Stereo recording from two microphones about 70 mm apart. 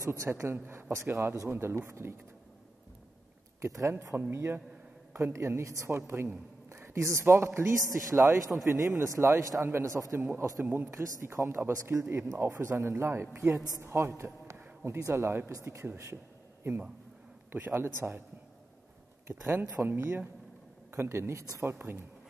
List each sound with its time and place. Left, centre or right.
0.0 s a woman's voice: right
3.6 s a man's voice: right
4.1 s a woman's voice: right
17.5 s speech: right
19.2 s speech: right
20.9 s a woman's voice: right